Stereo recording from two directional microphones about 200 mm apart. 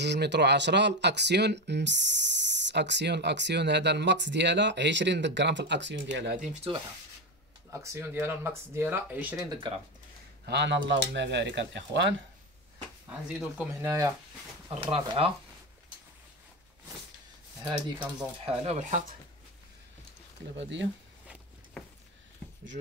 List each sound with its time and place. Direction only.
0.0 s speech: 60° right (ahead or behind)
6.4 s speech: 30° right (ahead or behind)
7.7 s speech: 15° right (ahead or behind)
10.4 s speech: 60° right (ahead or behind)
13.3 s speech: 5° right (ahead or behind)
14.8 s speech: 30° right (ahead or behind)
17.8 s speech: 25° right (ahead or behind)
20.5 s speech: 65° right (ahead or behind)